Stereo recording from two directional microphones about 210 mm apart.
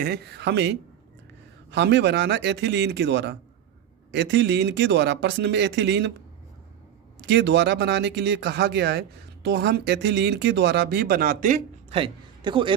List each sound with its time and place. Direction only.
0.0 s speech: 50° right (ahead or behind)
7.2 s speech: 55° right (ahead or behind); by 12.7 s 25° right (ahead or behind)